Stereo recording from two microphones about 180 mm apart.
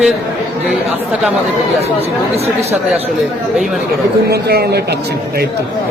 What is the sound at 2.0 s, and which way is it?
Speech, 35° right (ahead or behind).